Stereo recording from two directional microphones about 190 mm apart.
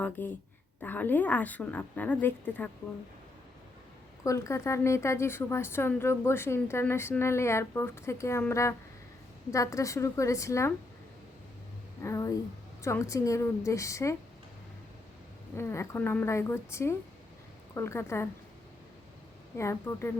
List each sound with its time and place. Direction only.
0.0 s a woman's voice: 10° left (ahead or behind)
4.2 s a woman's voice: 15° left (ahead or behind)
12.0 s a woman's voice: 15° left (ahead or behind)
15.5 s a woman's voice: 15° left (ahead or behind)
19.5 s a woman's voice: 15° left (ahead or behind)